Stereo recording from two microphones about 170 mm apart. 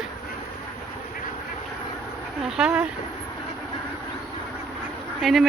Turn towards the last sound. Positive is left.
turn(degrees=0)  # may be behind; listen again after turning